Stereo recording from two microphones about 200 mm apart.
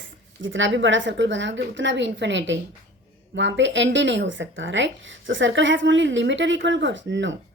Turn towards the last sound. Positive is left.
turn(degrees=-65)  # may be behind; listen again after turning